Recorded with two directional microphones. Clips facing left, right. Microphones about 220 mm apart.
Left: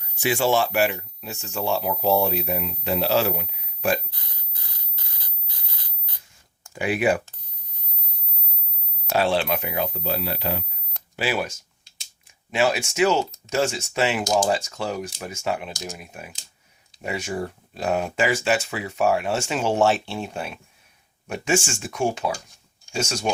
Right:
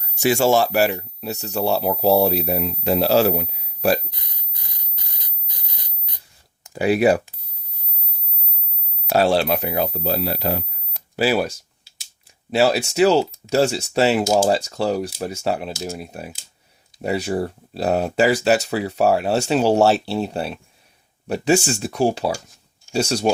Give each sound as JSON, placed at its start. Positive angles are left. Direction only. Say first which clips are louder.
{"t": 0.0, "sound": "speech", "louder": "right 5 dB", "side_deg": -40}
{"t": 4.1, "sound": "a sound", "louder": "right 2 dB", "side_deg": -20}
{"t": 6.7, "sound": "speech", "louder": "right 6 dB", "side_deg": -40}
{"t": 9.1, "sound": "speech", "louder": "right 4 dB", "side_deg": -40}